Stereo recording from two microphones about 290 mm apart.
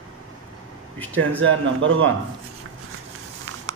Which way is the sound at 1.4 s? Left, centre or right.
Right.